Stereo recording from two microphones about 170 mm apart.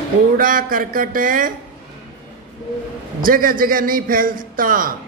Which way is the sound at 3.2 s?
55° right (ahead or behind).